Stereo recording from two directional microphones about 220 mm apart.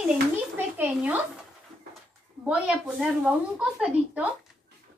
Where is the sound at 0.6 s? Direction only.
10° right (ahead or behind).